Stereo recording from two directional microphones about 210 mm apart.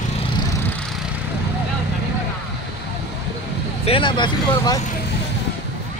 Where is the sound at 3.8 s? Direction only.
25° left (ahead or behind).